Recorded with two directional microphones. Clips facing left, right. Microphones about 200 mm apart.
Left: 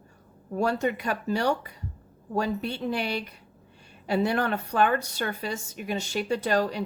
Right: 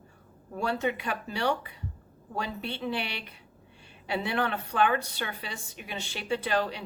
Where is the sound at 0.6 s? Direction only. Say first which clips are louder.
Left 4 dB; 45° left (ahead or behind).